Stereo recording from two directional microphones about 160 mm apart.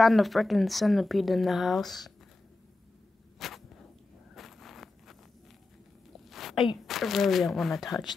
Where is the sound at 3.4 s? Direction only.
Centre (ahead or behind).